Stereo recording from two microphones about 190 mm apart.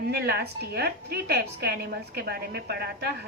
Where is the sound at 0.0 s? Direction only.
55° right (ahead or behind).